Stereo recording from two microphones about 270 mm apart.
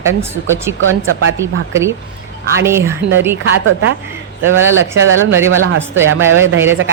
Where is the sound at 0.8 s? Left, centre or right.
Right.